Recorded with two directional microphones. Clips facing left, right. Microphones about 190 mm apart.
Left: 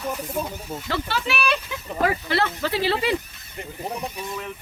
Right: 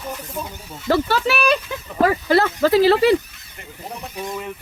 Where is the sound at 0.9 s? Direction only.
40° right (ahead or behind).